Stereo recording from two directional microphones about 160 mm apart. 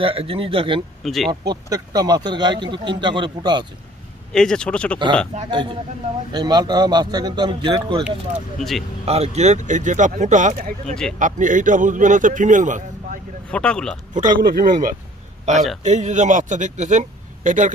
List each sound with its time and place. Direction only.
0.0 s speech: 35° right (ahead or behind)
1.0 s speech: centre (ahead or behind)
1.4 s speech: 25° right (ahead or behind)
4.3 s speech: 5° left (ahead or behind)
5.5 s speech: 30° right (ahead or behind)
8.5 s speech: centre (ahead or behind)
9.0 s a man's voice: 40° right (ahead or behind)
13.5 s speech: 5° left (ahead or behind)
14.1 s speech: 60° right (ahead or behind)
15.5 s a man's voice: 45° right (ahead or behind)